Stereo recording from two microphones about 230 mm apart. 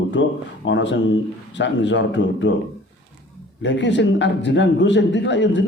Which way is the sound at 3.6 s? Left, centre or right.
Left.